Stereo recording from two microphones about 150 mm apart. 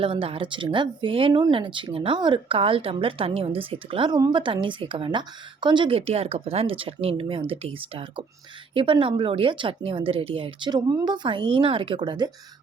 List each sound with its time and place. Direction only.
0.0 s speech: 35° right (ahead or behind)